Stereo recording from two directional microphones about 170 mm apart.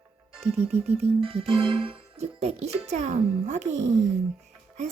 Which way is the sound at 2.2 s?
40° right (ahead or behind).